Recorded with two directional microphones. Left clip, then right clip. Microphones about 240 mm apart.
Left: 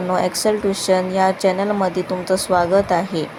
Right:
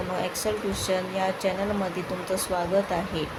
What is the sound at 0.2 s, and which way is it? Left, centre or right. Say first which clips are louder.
Speech: left 10 dB; left.